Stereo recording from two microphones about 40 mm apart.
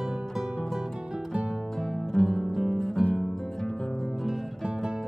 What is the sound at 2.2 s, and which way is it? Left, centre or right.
Music, centre.